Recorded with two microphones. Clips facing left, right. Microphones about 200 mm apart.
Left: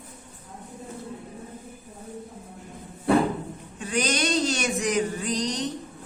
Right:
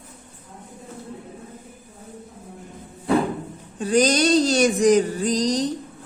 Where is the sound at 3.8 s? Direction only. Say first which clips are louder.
Right 8 dB; 35° right (ahead or behind).